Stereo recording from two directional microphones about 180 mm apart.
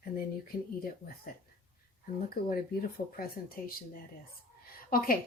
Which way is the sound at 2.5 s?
55° left (ahead or behind).